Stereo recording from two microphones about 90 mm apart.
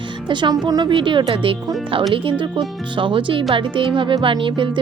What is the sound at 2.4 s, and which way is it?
Speech, 65° right (ahead or behind).